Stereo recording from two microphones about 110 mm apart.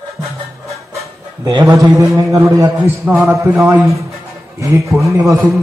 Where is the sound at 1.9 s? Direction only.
30° right (ahead or behind).